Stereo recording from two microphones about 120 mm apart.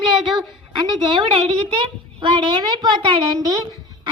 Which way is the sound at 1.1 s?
45° right (ahead or behind).